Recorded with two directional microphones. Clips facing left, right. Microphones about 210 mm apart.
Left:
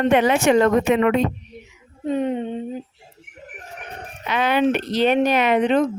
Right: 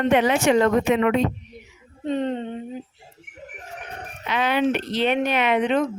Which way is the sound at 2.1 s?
10° left (ahead or behind).